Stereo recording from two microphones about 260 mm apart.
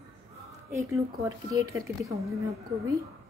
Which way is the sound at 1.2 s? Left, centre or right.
Centre.